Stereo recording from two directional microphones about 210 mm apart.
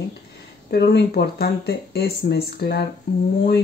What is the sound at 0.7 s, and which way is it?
Speech, 50° left (ahead or behind).